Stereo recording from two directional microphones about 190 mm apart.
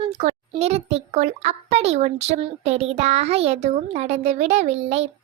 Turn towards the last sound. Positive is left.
turn(degrees=-35)  # may be behind; listen again after turning